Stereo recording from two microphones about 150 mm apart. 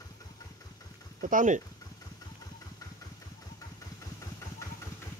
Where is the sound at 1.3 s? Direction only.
55° right (ahead or behind).